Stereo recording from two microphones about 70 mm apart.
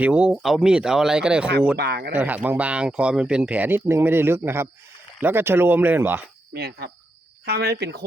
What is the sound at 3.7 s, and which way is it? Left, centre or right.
Speech, right.